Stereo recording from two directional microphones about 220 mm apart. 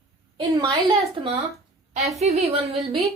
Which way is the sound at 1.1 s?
25° right (ahead or behind).